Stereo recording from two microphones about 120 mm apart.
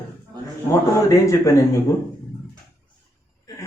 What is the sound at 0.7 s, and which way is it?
Speech, 25° left (ahead or behind).